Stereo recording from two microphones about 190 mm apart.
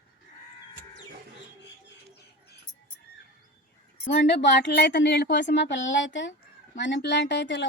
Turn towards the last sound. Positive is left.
turn(degrees=70)  # may be behind; listen again after turning